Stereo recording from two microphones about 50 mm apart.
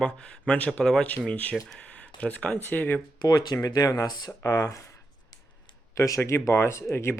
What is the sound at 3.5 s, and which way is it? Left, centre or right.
Speech, left.